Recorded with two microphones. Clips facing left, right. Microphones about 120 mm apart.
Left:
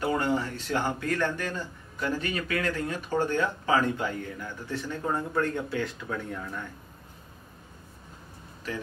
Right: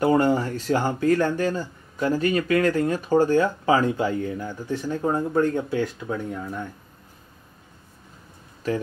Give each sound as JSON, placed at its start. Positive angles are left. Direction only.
{"t": 0.0, "sound": "speech", "side_deg": -40}